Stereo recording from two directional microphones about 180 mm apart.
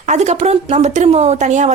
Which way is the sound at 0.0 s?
40° right (ahead or behind).